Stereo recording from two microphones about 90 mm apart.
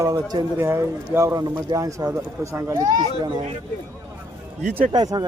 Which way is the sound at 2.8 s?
55° right (ahead or behind).